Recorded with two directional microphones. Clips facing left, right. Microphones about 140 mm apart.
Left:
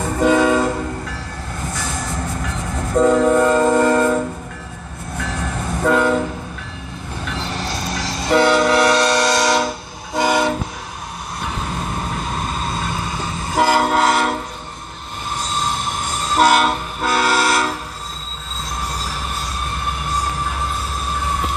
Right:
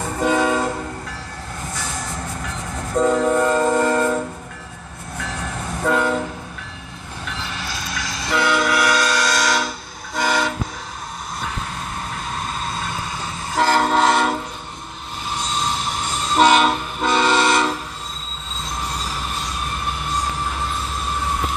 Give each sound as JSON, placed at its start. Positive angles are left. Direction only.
{"t": 0.2, "sound": "train", "side_deg": 90}
{"t": 2.4, "sound": "train", "side_deg": 80}
{"t": 5.8, "sound": "train", "side_deg": 60}
{"t": 7.2, "sound": "train", "side_deg": 40}
{"t": 12.4, "sound": "train", "side_deg": 10}
{"t": 16.3, "sound": "train", "side_deg": 5}